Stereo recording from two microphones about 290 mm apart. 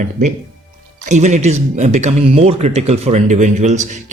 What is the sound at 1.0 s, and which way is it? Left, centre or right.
Speech, right.